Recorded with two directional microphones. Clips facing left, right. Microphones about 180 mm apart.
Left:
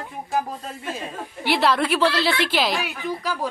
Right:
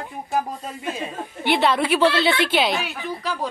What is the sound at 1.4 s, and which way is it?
A woman's voice, centre (ahead or behind).